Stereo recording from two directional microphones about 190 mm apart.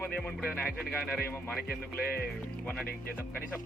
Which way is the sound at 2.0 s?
55° left (ahead or behind).